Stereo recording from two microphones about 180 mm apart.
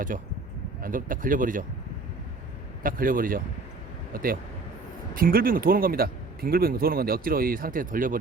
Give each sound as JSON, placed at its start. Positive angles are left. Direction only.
{"t": 0.8, "sound": "speech", "side_deg": -50}
{"t": 2.8, "sound": "speech", "side_deg": -50}